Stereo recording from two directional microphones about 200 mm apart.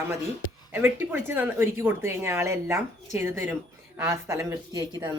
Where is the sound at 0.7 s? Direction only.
10° right (ahead or behind).